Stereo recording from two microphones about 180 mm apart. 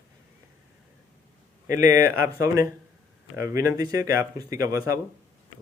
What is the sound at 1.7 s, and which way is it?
Speech, 15° right (ahead or behind).